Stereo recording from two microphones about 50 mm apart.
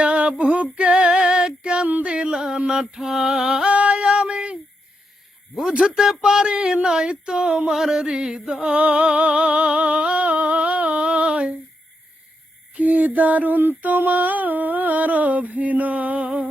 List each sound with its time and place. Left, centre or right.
0.0 s female singing: right
0.9 s female singing: centre
1.9 s a sound: right
2.9 s speech: centre
3.7 s female singing: right
5.7 s speech: centre
8.8 s music: right
12.7 s a sound: right